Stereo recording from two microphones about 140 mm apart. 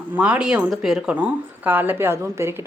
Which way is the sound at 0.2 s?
10° right (ahead or behind).